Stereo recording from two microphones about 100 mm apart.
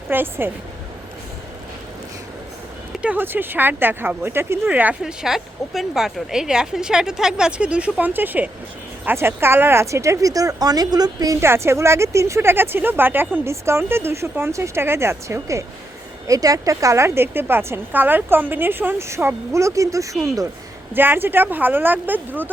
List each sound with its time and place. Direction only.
0.1 s speech: 20° right (ahead or behind)
3.0 s a woman's voice: 15° right (ahead or behind)
5.2 s a woman's voice: 5° right (ahead or behind); by 20.5 s 35° right (ahead or behind)
20.9 s speech: 20° right (ahead or behind)